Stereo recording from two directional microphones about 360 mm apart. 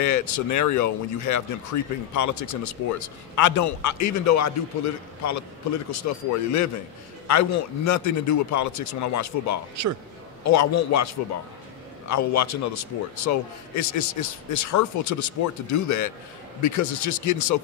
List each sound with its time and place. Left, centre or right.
0.0 s speech: left
7.2 s speech: left